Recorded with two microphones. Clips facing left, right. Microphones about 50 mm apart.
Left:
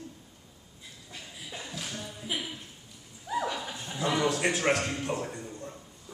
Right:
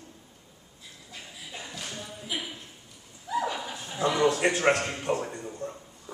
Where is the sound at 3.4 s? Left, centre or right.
Centre.